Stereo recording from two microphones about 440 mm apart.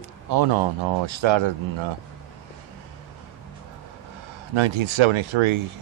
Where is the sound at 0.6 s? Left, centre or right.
Right.